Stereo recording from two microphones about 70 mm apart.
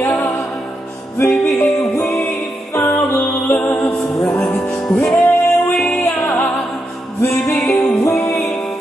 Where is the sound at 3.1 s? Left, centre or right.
Left.